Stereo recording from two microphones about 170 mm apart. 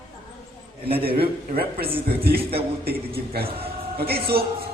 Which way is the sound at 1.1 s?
65° right (ahead or behind).